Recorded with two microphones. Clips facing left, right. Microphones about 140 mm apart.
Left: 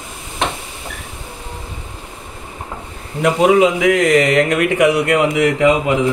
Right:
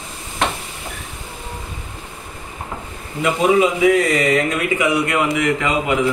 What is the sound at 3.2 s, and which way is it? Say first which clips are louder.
Speech: left 3 dB; 75° left (ahead or behind).